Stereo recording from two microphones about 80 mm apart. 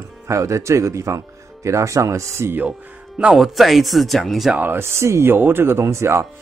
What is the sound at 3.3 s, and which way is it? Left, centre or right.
Speech, centre.